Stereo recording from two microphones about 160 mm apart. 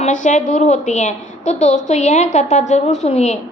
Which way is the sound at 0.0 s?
50° left (ahead or behind).